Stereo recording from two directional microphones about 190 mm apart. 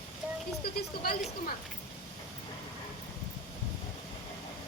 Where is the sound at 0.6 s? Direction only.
55° left (ahead or behind).